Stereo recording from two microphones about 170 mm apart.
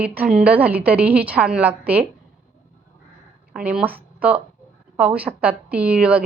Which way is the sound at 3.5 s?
5° right (ahead or behind).